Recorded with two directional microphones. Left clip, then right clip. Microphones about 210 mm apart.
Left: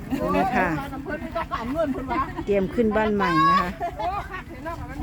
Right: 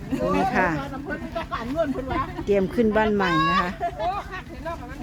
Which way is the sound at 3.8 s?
45° left (ahead or behind).